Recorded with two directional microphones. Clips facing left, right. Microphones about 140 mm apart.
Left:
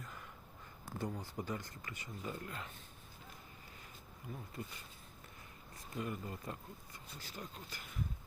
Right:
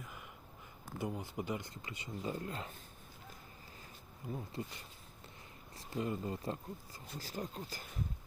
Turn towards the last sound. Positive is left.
turn(degrees=-35)  # may be behind; listen again after turning